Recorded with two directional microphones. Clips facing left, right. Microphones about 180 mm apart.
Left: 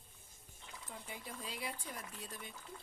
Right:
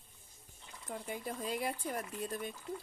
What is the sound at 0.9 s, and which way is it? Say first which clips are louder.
Speech: right 9 dB; 50° right (ahead or behind).